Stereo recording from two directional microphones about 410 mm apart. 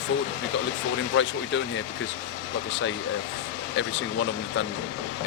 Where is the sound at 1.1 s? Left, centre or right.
Left.